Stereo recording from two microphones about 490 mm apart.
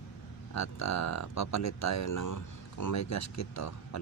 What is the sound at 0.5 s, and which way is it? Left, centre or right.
Speech, left.